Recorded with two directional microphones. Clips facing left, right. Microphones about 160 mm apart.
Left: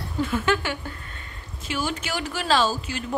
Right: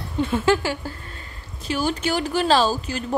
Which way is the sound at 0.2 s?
30° right (ahead or behind).